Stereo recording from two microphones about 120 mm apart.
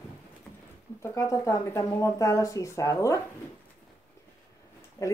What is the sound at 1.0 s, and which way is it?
Speech, 20° left (ahead or behind).